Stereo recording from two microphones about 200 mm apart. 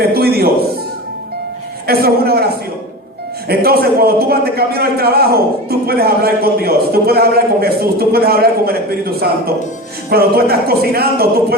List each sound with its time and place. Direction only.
0.0 s a sound: 50° right (ahead or behind)
1.9 s a man's voice: 50° right (ahead or behind)
3.5 s a man's voice: 50° right (ahead or behind)